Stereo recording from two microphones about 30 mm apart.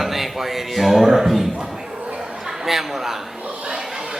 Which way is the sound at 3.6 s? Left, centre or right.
Right.